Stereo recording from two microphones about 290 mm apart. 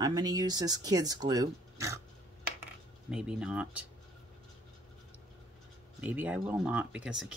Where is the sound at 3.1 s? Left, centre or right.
Centre.